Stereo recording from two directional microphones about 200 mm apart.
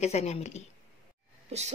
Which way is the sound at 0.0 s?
35° left (ahead or behind).